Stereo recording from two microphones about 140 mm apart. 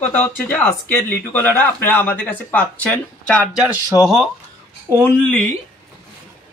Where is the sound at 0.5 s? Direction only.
15° left (ahead or behind).